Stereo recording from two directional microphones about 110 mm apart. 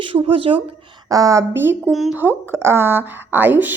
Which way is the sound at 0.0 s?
55° right (ahead or behind).